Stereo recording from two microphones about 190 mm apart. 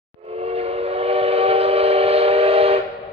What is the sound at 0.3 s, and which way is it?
Train, 30° right (ahead or behind).